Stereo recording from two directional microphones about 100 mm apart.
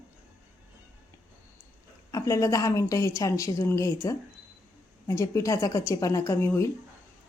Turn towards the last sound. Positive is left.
turn(degrees=30)  # may be behind; listen again after turning